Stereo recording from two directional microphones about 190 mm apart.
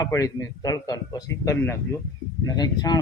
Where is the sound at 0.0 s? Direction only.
15° left (ahead or behind).